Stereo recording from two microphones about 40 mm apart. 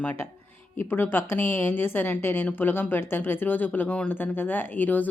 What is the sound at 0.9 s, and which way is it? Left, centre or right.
A woman's voice, left.